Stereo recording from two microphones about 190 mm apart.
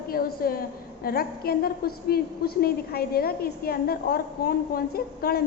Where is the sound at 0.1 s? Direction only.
50° left (ahead or behind).